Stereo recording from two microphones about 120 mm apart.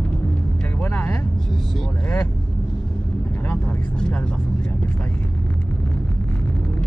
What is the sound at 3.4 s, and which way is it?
Vehicle, 15° left (ahead or behind).